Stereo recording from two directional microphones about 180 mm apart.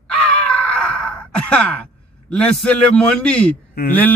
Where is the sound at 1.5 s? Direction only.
5° left (ahead or behind).